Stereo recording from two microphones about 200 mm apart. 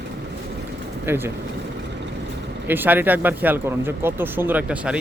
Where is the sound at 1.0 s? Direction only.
10° right (ahead or behind).